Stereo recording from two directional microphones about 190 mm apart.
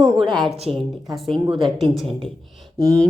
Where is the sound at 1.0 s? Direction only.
Centre (ahead or behind).